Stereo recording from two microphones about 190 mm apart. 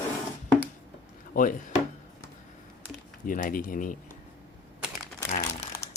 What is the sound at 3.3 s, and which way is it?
Speech, 45° left (ahead or behind).